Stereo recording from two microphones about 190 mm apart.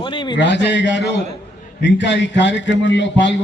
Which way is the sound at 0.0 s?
25° left (ahead or behind).